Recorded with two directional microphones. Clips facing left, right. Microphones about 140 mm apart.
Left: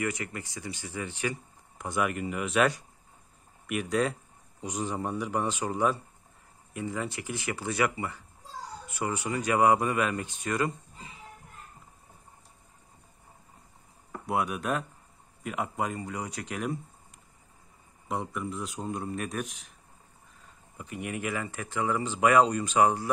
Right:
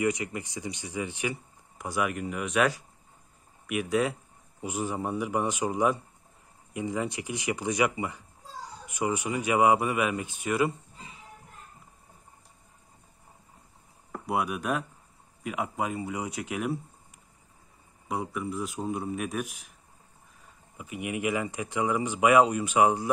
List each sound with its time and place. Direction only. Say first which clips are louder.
0.0 s speech: right 4 dB; 20° right (ahead or behind)
1.8 s a man's voice: even; 5° right (ahead or behind)
14.2 s a man's voice: even; centre (ahead or behind)
18.0 s a man's voice: right 1 dB; 5° right (ahead or behind)
20.7 s speech: right 2 dB; 10° right (ahead or behind)